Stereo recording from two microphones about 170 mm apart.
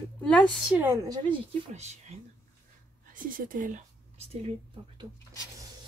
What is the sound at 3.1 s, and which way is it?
Speech, 50° right (ahead or behind).